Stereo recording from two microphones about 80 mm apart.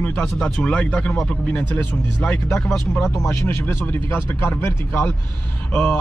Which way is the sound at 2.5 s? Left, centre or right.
Centre.